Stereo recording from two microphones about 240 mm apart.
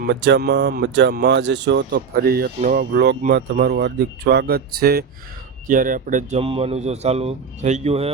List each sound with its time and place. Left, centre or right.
0.0 s a man's voice: right